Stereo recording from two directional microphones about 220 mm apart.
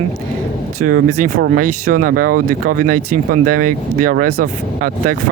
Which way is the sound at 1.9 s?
40° right (ahead or behind).